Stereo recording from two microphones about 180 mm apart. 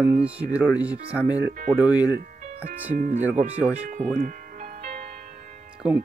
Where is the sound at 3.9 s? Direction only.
45° right (ahead or behind).